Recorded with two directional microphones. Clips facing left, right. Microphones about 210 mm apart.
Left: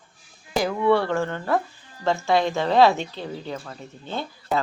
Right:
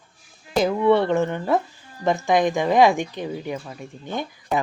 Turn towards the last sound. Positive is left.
turn(degrees=-15)  # may be behind; listen again after turning